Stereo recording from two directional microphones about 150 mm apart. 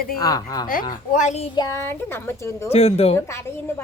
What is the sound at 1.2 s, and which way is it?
Speech, 50° left (ahead or behind).